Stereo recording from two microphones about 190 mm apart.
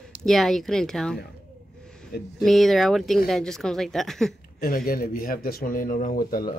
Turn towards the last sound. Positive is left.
turn(degrees=50)  # may be behind; listen again after turning